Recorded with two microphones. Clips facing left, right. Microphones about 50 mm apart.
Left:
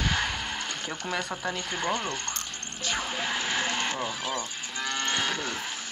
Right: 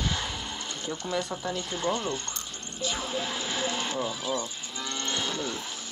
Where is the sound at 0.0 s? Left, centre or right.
Left.